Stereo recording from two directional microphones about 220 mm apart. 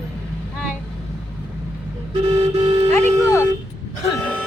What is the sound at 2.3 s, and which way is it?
Music, 25° right (ahead or behind).